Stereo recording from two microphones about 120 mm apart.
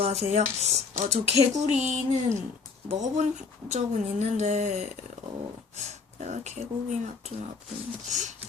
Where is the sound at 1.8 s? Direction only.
75° right (ahead or behind).